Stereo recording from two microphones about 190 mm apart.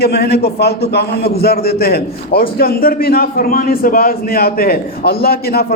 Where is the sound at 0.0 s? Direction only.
55° left (ahead or behind).